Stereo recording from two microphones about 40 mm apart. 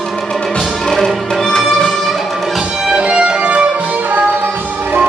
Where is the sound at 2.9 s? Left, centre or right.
Right.